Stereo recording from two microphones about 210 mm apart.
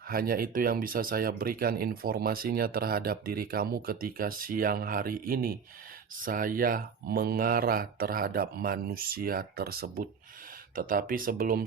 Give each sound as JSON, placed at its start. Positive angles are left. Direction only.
{"t": 0.1, "sound": "speech", "side_deg": -45}